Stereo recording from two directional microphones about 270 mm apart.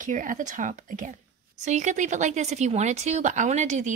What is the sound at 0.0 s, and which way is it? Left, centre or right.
Speech, right.